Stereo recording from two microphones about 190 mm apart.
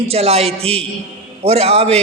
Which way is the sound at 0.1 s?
35° right (ahead or behind).